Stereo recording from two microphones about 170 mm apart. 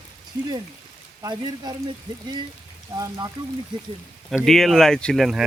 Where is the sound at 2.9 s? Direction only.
20° right (ahead or behind).